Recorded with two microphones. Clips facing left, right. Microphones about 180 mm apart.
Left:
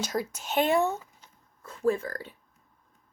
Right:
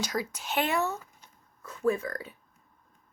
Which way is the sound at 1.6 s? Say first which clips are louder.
Left 1 dB; 30° left (ahead or behind).